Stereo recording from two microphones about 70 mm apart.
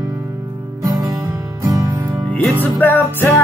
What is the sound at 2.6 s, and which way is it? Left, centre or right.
Music, left.